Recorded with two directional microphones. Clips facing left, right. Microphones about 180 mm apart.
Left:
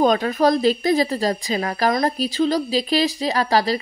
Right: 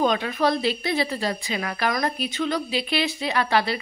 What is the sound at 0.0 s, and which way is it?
A woman's voice, 45° left (ahead or behind).